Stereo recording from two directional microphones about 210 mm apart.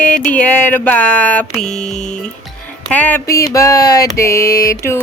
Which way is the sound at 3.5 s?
15° left (ahead or behind).